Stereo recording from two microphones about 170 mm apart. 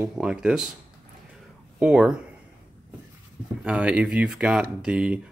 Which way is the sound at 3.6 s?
5° right (ahead or behind).